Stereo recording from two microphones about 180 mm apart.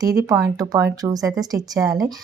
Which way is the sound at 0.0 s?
20° right (ahead or behind).